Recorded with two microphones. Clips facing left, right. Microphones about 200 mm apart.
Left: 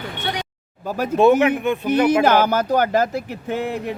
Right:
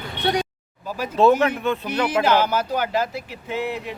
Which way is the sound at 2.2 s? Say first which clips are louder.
Left 3 dB; 50° left (ahead or behind).